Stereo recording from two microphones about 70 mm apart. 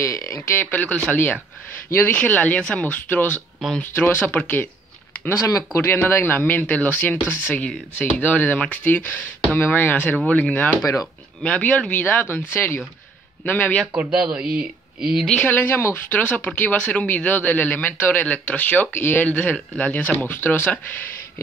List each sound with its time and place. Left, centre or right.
0.0 s speech: left
0.6 s speech: left
1.1 s speech: left
5.8 s speech: left
14.1 s speech: centre
15.2 s speech: centre
15.5 s speech: left
20.3 s speech: left